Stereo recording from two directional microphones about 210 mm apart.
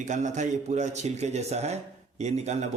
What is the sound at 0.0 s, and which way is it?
A man's voice, 35° right (ahead or behind).